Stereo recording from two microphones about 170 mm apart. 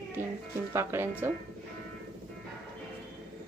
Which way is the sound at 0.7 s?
15° right (ahead or behind).